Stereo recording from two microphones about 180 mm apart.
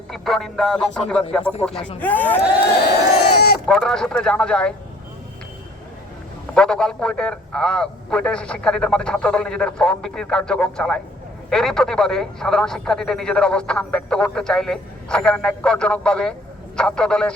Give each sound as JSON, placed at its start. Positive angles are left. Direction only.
{"t": 0.1, "sound": "speech", "side_deg": 0}
{"t": 3.3, "sound": "sheep", "side_deg": 60}
{"t": 3.7, "sound": "speech", "side_deg": 5}
{"t": 6.5, "sound": "speech", "side_deg": 5}